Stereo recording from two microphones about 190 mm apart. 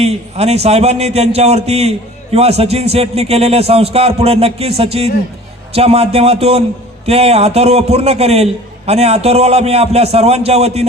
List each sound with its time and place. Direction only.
0.0 s a man's voice: 35° right (ahead or behind)